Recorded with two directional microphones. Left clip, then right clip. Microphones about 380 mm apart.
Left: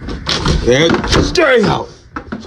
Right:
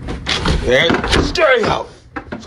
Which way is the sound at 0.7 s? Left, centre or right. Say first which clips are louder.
Left 2 dB; centre.